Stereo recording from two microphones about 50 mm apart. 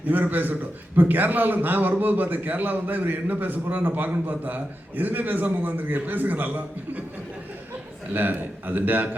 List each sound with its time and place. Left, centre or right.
0.1 s a man's voice: right
8.1 s a man's voice: right